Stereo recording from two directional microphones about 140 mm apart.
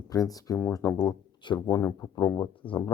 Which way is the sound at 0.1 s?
25° left (ahead or behind).